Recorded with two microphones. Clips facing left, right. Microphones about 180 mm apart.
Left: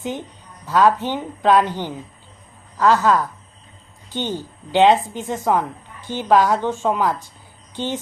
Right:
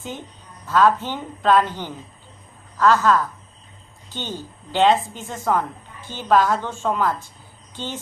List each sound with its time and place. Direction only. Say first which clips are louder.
0.7 s speech: left 1 dB; 15° left (ahead or behind)